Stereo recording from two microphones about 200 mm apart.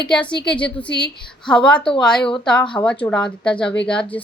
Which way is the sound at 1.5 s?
5° left (ahead or behind).